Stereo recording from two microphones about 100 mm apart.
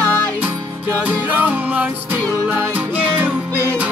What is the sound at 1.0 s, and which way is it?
Music, 15° right (ahead or behind).